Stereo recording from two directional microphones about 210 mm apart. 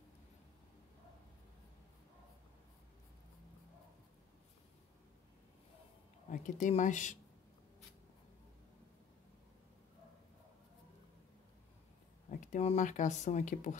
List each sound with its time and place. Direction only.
6.3 s speech: 35° left (ahead or behind)
12.3 s speech: 35° left (ahead or behind)